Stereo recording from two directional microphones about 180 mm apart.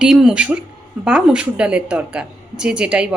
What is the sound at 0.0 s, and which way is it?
A woman's voice, 5° right (ahead or behind).